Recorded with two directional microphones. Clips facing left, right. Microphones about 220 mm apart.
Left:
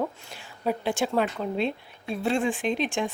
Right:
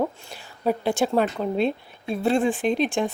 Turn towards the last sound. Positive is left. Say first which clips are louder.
# right 4 dB
turn(degrees=-35)  # may be behind; listen again after turning